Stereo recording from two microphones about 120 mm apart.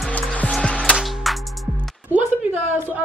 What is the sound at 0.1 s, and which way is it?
Music, 10° left (ahead or behind).